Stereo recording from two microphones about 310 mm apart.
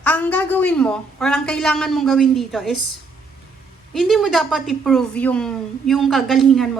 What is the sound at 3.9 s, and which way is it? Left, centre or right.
A woman's voice, centre.